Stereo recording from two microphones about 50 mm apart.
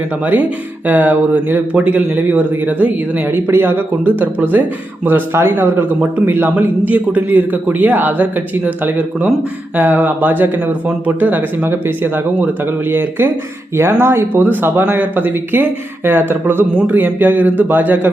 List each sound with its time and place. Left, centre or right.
0.9 s a man's voice: right
1.7 s a man's voice: right
3.2 s a man's voice: right
11.6 s speech: right
13.7 s speech: right
16.7 s a man's voice: right